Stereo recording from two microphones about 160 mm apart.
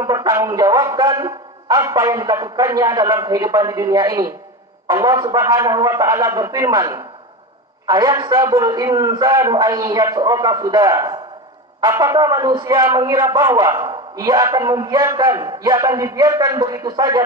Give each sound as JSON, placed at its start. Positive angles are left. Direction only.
{"t": 0.0, "sound": "a man's voice", "side_deg": -25}